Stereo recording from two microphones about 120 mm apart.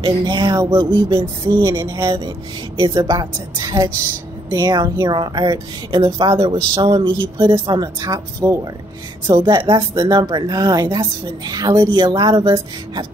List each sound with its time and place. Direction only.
0.0 s a woman's voice: 35° right (ahead or behind)
6.4 s a woman's voice: 45° right (ahead or behind)